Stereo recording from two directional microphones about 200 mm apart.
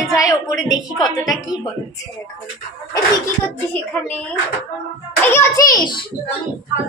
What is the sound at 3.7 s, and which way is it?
Speech, 10° left (ahead or behind).